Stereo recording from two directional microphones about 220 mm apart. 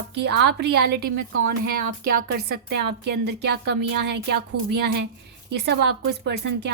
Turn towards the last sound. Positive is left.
turn(degrees=-50)  # may be behind; listen again after turning